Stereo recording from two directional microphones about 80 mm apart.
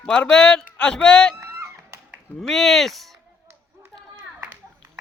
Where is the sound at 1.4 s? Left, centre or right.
Right.